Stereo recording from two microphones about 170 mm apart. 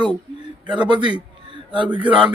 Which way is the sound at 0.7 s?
25° right (ahead or behind).